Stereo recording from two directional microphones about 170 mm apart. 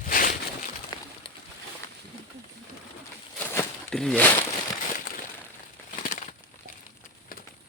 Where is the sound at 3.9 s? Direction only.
5° left (ahead or behind).